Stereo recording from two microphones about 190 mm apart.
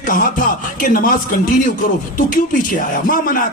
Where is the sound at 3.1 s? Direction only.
45° left (ahead or behind).